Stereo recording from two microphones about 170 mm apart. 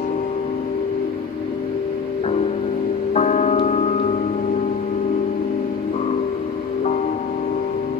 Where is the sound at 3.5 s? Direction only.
40° left (ahead or behind).